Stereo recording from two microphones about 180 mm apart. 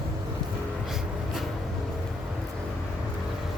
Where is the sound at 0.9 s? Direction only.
Centre (ahead or behind).